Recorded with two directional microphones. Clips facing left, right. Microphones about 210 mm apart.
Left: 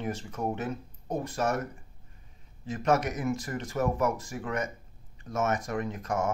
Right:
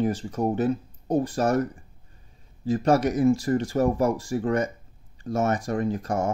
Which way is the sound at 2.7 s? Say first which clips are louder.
Right 6 dB; 30° right (ahead or behind).